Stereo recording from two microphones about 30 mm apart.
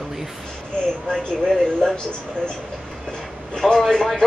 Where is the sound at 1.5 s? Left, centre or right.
Left.